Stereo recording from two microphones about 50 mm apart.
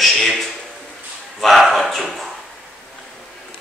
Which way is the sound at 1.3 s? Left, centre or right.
Centre.